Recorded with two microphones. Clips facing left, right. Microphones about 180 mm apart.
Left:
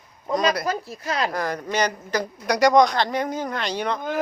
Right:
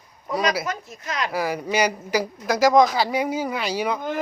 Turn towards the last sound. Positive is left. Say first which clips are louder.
# right 1 dB
turn(degrees=-5)  # may be behind; listen again after turning